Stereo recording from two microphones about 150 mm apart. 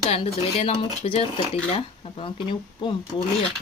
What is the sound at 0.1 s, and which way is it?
Speech, 40° left (ahead or behind).